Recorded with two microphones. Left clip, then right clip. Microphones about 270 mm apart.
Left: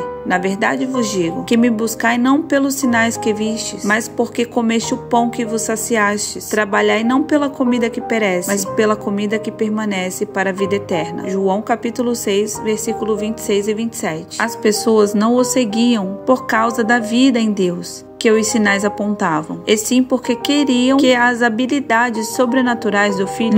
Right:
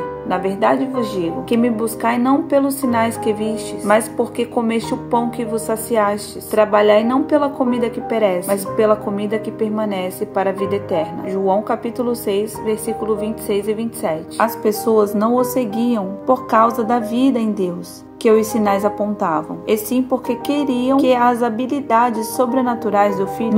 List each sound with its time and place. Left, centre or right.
0.3 s speech: left